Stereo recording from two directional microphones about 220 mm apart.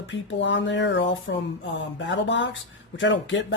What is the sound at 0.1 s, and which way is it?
Speech, 55° left (ahead or behind).